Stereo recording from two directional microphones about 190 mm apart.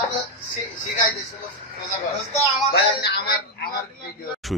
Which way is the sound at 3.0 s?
55° left (ahead or behind).